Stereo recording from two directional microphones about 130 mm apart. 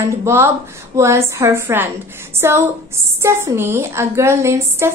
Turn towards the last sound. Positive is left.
turn(degrees=-20)  # may be behind; listen again after turning